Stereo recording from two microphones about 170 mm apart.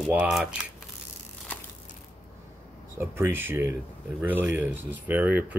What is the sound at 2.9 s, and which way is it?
Speech, 15° right (ahead or behind).